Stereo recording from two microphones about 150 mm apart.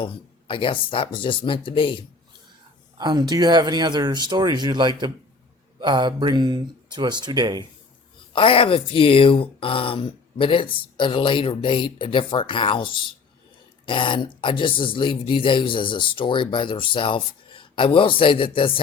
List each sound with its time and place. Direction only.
0.0 s speech: 35° left (ahead or behind)
3.0 s speech: 30° right (ahead or behind)
8.3 s speech: 35° left (ahead or behind)